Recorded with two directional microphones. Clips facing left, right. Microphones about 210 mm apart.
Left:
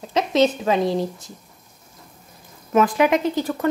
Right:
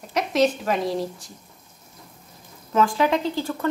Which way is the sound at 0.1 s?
25° left (ahead or behind).